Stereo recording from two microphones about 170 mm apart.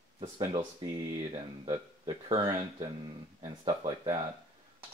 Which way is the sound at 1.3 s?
35° right (ahead or behind).